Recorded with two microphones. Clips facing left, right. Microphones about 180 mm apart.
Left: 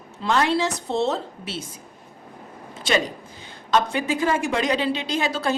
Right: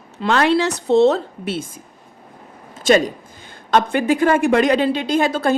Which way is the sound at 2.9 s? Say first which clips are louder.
Right 8 dB; 45° right (ahead or behind).